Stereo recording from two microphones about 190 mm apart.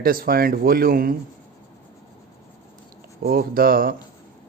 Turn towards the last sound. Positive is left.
turn(degrees=-50)  # may be behind; listen again after turning